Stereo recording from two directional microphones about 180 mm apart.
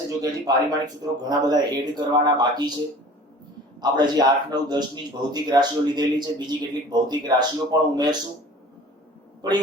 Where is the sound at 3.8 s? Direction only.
25° right (ahead or behind).